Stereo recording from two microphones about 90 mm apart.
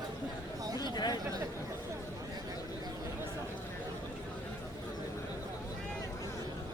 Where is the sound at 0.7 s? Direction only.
50° left (ahead or behind).